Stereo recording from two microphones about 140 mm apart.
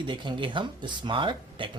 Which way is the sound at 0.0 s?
35° right (ahead or behind).